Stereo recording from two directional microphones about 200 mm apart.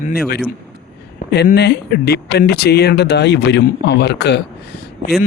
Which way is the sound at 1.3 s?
55° left (ahead or behind).